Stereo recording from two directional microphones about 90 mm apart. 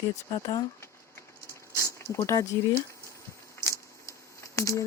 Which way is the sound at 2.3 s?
50° left (ahead or behind).